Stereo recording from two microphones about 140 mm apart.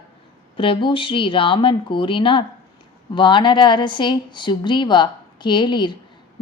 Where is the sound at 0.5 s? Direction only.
40° left (ahead or behind).